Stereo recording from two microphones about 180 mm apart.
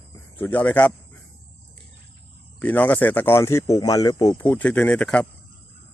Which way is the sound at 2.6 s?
10° left (ahead or behind).